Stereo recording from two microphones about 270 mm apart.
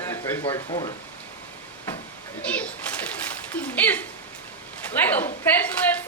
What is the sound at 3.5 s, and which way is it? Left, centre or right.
Speech, centre.